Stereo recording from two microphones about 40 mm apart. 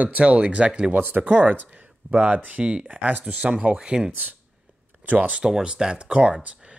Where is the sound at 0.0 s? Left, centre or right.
Right.